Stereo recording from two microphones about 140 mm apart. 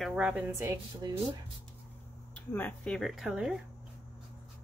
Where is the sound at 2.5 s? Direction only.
10° left (ahead or behind).